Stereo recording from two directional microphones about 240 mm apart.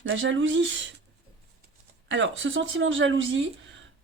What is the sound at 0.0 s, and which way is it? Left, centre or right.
Speech, right.